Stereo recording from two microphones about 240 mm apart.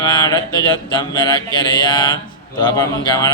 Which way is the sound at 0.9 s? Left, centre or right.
Centre.